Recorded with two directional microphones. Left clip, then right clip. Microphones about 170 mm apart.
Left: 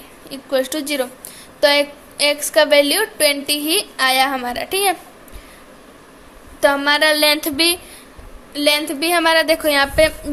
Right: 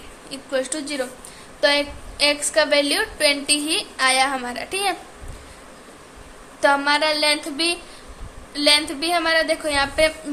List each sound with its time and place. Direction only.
0.3 s a woman's voice: 30° left (ahead or behind)
6.6 s a sound: 30° left (ahead or behind); by 7.8 s 45° left (ahead or behind)
8.5 s a woman's voice: 35° left (ahead or behind)